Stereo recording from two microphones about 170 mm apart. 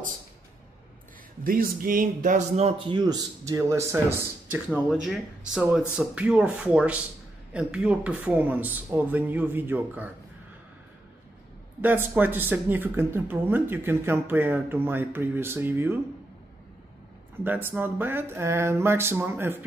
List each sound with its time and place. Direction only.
1.4 s speech: 60° right (ahead or behind)
2.9 s speech: 25° right (ahead or behind)
11.8 s speech: 10° right (ahead or behind)
17.4 s speech: 10° right (ahead or behind)